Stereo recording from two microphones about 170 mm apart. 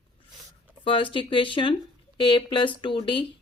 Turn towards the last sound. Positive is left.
turn(degrees=30)  # may be behind; listen again after turning